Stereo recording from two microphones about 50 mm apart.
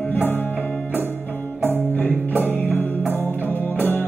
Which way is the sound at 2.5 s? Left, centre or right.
Left.